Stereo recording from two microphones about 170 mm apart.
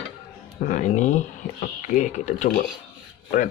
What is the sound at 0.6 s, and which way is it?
Speech, 50° left (ahead or behind).